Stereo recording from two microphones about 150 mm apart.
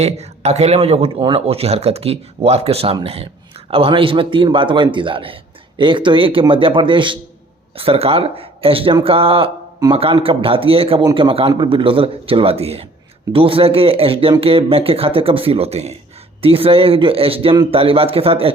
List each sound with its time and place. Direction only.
0.0 s a man's voice: 45° right (ahead or behind)